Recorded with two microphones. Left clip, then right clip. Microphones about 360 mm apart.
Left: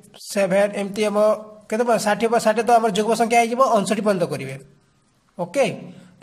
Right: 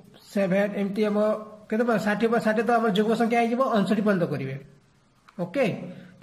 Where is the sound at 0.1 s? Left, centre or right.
Left.